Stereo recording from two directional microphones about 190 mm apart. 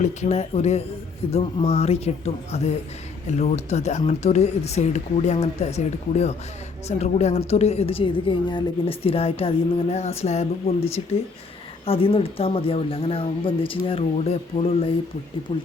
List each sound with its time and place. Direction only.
0.0 s a woman's voice: 35° left (ahead or behind)
11.9 s speech: 30° left (ahead or behind)